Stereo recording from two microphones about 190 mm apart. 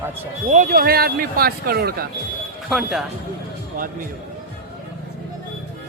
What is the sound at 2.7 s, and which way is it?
Speech, centre (ahead or behind).